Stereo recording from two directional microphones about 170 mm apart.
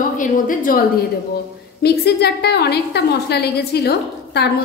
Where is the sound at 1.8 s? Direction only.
70° left (ahead or behind).